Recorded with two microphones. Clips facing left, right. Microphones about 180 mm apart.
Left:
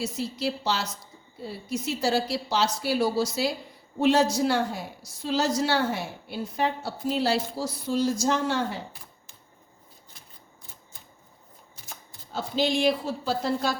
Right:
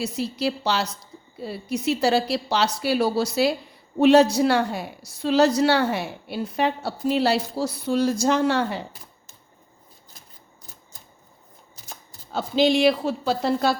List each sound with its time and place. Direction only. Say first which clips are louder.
0.0 s a woman's voice: right 4 dB; 65° right (ahead or behind)
12.3 s a woman's voice: right 6 dB; 70° right (ahead or behind)